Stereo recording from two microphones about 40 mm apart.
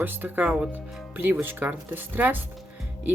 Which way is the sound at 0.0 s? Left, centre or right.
Right.